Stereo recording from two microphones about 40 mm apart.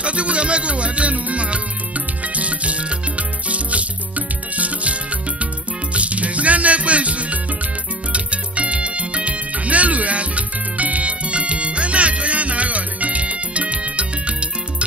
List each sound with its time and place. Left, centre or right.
0.0 s music: right
5.9 s music: right